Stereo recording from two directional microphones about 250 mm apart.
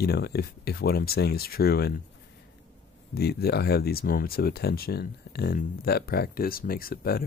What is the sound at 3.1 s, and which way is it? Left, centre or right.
Speech, left.